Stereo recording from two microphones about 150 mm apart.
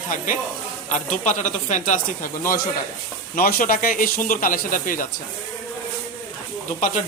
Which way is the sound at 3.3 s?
75° left (ahead or behind).